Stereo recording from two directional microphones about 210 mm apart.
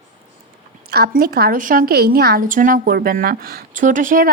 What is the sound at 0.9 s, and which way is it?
A woman's voice, 50° right (ahead or behind).